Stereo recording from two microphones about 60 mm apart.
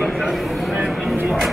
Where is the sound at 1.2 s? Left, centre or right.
Centre.